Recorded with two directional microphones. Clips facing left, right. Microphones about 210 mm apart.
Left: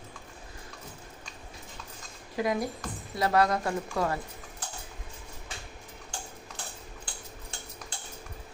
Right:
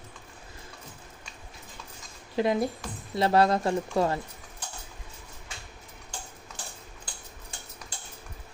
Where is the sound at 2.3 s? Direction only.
25° right (ahead or behind).